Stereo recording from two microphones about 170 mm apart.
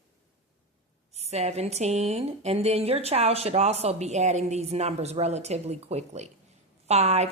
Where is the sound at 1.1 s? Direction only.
40° right (ahead or behind).